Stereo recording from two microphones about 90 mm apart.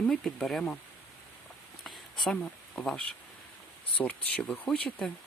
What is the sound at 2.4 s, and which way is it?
Speech, 10° left (ahead or behind).